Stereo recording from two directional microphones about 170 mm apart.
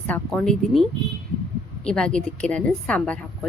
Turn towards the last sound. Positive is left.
turn(degrees=5)  # may be behind; listen again after turning